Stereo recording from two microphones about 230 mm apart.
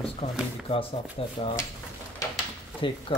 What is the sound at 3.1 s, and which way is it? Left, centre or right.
Speech, left.